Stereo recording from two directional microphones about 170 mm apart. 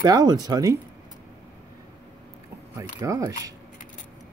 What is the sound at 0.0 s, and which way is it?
Speech, 25° right (ahead or behind).